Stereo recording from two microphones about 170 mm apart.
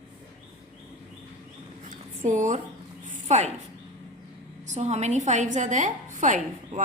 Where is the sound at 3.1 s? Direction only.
40° right (ahead or behind).